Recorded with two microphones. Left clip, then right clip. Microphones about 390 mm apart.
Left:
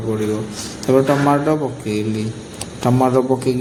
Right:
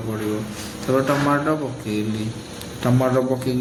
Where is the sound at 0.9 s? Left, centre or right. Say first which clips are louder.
Left 5 dB; right.